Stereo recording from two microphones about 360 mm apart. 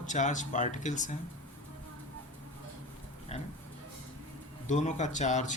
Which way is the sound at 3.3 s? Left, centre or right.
Centre.